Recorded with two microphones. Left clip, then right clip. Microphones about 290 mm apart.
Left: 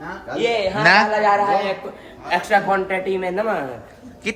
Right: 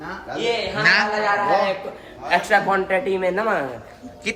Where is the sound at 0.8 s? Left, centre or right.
Centre.